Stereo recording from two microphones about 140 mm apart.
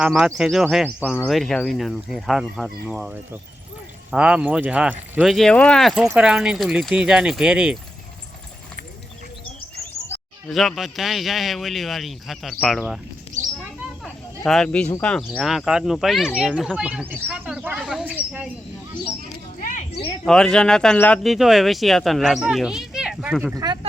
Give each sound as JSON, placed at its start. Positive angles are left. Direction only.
{"t": 0.0, "sound": "speech", "side_deg": 0}
{"t": 4.1, "sound": "speech", "side_deg": -10}
{"t": 10.5, "sound": "speech", "side_deg": 0}
{"t": 14.0, "sound": "a sound", "side_deg": 0}
{"t": 15.0, "sound": "speech", "side_deg": 5}
{"t": 16.7, "sound": "speech", "side_deg": -10}
{"t": 19.5, "sound": "a sound", "side_deg": 75}
{"t": 20.2, "sound": "speech", "side_deg": 5}
{"t": 21.3, "sound": "speech", "side_deg": 0}